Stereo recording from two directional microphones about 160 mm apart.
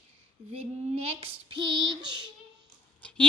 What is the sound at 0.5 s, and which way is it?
Child singing, 40° right (ahead or behind).